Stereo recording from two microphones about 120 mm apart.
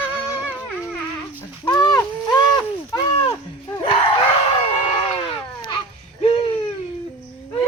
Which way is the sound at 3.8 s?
50° left (ahead or behind).